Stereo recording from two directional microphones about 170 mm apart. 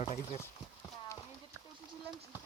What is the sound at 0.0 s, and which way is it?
Speech, 40° left (ahead or behind).